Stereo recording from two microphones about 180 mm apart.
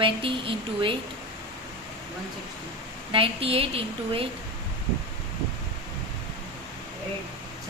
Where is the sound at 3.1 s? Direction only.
30° right (ahead or behind).